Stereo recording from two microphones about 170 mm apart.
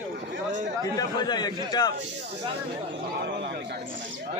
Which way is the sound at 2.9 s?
85° right.